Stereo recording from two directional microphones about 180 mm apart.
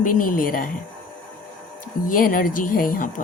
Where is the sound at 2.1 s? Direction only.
50° left (ahead or behind).